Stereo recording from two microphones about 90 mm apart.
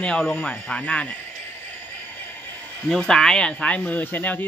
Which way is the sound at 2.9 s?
10° left (ahead or behind).